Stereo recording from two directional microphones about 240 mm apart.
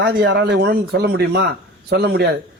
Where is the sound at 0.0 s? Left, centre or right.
Right.